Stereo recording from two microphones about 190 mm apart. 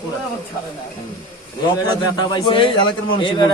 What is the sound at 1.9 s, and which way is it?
A man's voice, 25° left (ahead or behind).